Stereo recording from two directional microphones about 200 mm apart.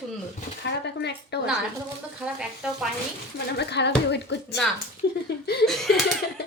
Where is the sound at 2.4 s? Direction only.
Centre (ahead or behind).